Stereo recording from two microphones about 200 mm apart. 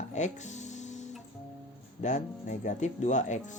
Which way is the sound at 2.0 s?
35° left (ahead or behind).